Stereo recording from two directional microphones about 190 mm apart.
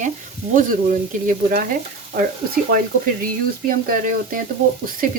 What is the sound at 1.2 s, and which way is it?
Speech, 45° right (ahead or behind).